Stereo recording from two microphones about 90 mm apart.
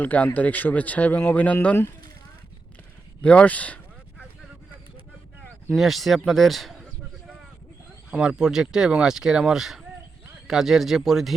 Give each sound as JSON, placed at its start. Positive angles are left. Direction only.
{"t": 0.0, "sound": "speech", "side_deg": 20}
{"t": 3.2, "sound": "speech", "side_deg": 15}
{"t": 5.7, "sound": "speech", "side_deg": 0}
{"t": 8.1, "sound": "speech", "side_deg": -10}